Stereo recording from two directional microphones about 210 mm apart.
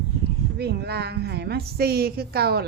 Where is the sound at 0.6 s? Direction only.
50° right (ahead or behind).